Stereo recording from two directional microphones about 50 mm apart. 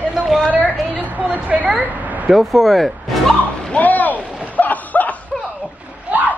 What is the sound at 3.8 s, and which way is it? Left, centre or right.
Boat, left.